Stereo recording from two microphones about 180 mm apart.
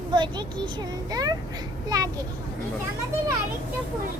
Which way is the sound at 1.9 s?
20° right (ahead or behind).